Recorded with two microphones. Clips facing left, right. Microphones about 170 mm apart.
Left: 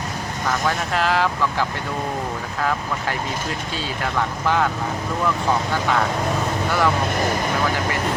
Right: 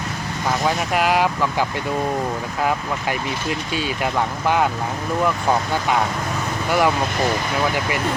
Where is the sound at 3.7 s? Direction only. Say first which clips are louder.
Right 3 dB; 15° right (ahead or behind).